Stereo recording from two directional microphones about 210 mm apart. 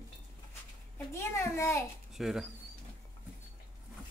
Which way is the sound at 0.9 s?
10° left (ahead or behind).